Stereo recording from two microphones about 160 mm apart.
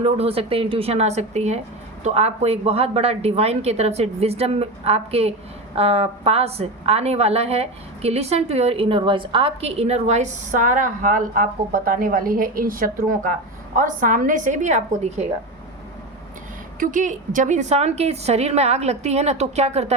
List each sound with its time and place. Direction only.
0.0 s a woman's voice: 40° right (ahead or behind)
16.8 s a woman's voice: 55° right (ahead or behind)